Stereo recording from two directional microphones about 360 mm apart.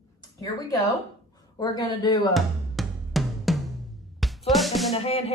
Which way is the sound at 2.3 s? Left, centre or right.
Centre.